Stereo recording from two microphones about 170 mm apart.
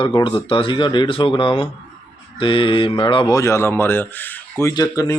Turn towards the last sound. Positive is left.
turn(degrees=20)  # may be behind; listen again after turning